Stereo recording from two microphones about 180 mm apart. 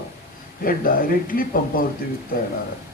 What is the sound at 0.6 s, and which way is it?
A man's voice, 50° left (ahead or behind).